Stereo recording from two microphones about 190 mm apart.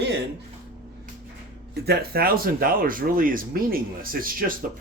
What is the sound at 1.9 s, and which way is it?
Speech, 55° right (ahead or behind).